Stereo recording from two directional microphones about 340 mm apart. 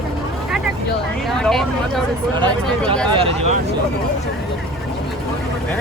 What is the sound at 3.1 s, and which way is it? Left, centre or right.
Speech, centre.